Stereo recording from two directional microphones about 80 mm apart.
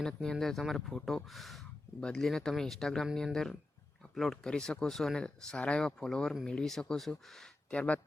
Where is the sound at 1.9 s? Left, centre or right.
Centre.